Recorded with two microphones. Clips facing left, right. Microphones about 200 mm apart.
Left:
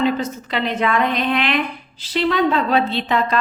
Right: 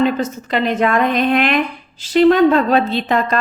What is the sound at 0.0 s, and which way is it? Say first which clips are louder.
A woman's voice: right 3 dB; 45° right (ahead or behind).